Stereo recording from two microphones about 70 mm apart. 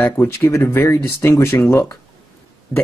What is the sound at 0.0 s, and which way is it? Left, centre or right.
Speech, left.